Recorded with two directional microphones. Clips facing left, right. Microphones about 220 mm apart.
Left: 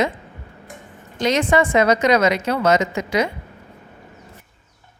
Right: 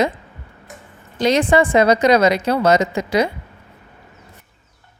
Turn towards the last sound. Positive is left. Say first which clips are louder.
# right 3 dB
turn(degrees=-35)  # may be behind; listen again after turning